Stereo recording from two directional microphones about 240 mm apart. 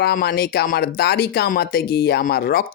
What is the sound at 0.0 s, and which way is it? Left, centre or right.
Speech, left.